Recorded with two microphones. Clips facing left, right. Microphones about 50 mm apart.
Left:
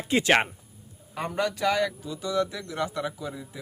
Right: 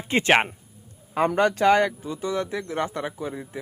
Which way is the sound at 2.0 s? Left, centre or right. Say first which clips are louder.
Even; right.